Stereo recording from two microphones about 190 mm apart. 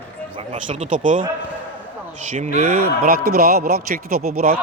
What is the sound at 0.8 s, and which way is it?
Speech, 45° right (ahead or behind).